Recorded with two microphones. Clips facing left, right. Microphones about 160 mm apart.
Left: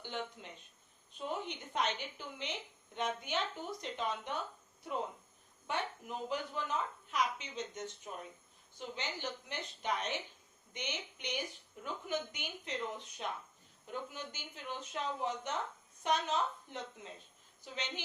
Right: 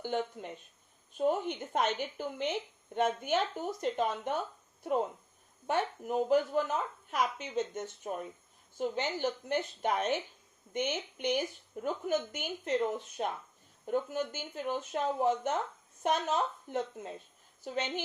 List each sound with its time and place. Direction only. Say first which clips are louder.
0.0 s a woman's voice: right 8 dB; 50° right (ahead or behind)
5.6 s a woman's voice: right 7 dB; 50° right (ahead or behind)